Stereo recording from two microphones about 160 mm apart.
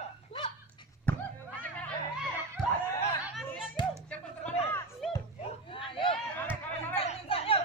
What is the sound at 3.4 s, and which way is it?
Music, 5° right (ahead or behind).